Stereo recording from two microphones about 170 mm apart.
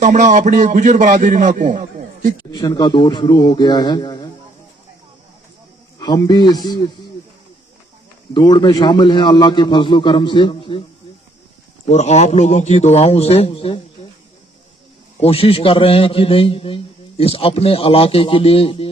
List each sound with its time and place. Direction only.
0.0 s a man's voice: 45° right (ahead or behind)
2.5 s a man's voice: 25° left (ahead or behind)
6.0 s a man's voice: 25° left (ahead or behind)
8.3 s a man's voice: 25° left (ahead or behind)
11.9 s a man's voice: 40° left (ahead or behind)
15.2 s a man's voice: 35° left (ahead or behind)